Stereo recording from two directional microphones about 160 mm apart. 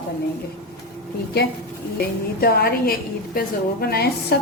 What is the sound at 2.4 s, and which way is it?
A woman's voice, 75° left (ahead or behind).